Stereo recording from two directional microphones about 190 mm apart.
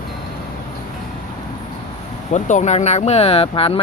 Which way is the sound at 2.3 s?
40° left (ahead or behind).